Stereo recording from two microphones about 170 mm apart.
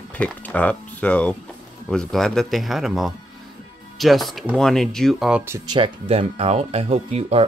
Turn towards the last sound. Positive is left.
turn(degrees=-35)  # may be behind; listen again after turning